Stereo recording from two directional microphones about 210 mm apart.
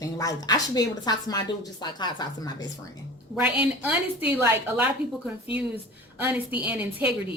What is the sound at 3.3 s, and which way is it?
A woman's voice, 5° right (ahead or behind).